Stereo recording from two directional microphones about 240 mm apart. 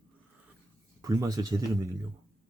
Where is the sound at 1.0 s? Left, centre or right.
Centre.